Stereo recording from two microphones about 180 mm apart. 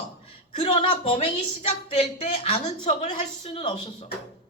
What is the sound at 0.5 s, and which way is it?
A woman's voice, 35° left (ahead or behind).